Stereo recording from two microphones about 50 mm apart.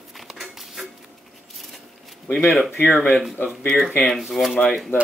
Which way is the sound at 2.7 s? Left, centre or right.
Left.